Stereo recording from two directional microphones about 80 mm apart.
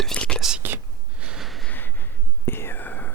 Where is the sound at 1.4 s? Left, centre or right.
Centre.